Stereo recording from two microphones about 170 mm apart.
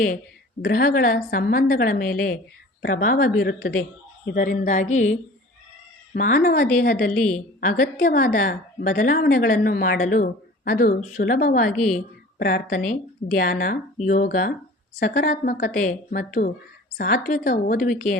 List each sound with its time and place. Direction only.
0.6 s a woman's voice: 60° left (ahead or behind)
6.1 s a woman's voice: 50° left (ahead or behind)
7.1 s a woman's voice: 5° left (ahead or behind)
7.3 s a woman's voice: 55° left (ahead or behind)